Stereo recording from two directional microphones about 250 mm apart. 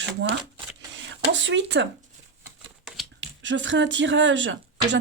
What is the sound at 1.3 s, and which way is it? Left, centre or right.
Speech, right.